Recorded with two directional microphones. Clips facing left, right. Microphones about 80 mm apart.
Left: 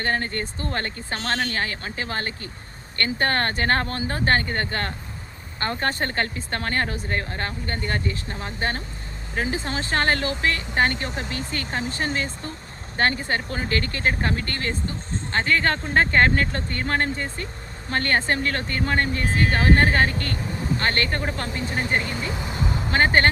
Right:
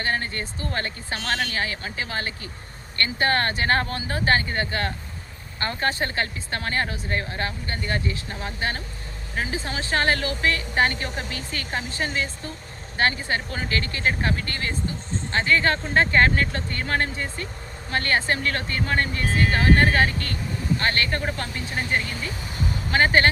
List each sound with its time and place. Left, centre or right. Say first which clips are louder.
0.0 s speech: left 2 dB; left